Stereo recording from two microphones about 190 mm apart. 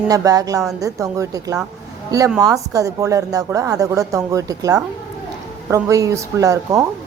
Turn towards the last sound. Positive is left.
turn(degrees=-15)  # may be behind; listen again after turning